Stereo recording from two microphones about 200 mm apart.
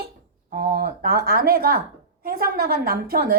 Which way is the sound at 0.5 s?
45° right (ahead or behind).